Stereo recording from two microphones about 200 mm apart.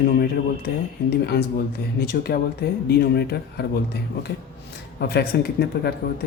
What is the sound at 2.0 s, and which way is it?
Speech, 50° left (ahead or behind).